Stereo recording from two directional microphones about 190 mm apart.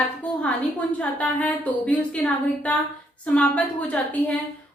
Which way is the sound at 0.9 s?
5° left (ahead or behind).